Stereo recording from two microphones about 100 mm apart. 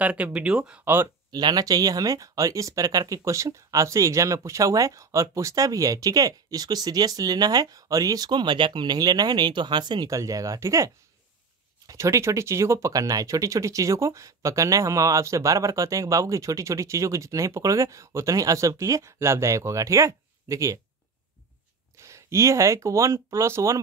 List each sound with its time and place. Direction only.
0.0 s speech: 15° right (ahead or behind)
1.3 s speech: 40° right (ahead or behind)
21.9 s speech: 30° right (ahead or behind)